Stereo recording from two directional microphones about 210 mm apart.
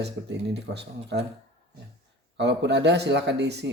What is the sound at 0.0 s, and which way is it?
Speech, 55° right (ahead or behind).